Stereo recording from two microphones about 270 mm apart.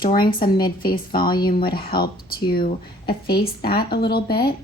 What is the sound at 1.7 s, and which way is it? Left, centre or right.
Speech, left.